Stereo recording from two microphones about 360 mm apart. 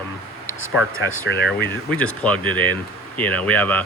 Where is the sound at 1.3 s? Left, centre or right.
Left.